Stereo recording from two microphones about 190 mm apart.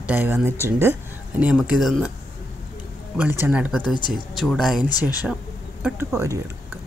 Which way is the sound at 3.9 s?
25° left (ahead or behind).